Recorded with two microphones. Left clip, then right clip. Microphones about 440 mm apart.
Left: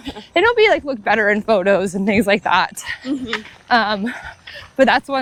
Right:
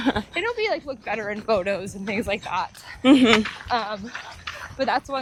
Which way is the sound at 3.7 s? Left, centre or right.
Left.